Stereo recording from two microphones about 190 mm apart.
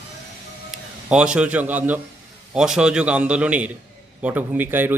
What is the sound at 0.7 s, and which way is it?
A man's voice, 5° right (ahead or behind).